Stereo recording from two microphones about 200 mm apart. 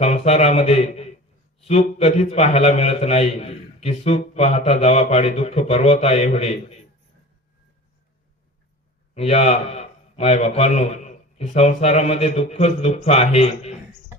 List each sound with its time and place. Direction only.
0.0 s a man's voice: 30° left (ahead or behind)
9.1 s a man's voice: 30° left (ahead or behind)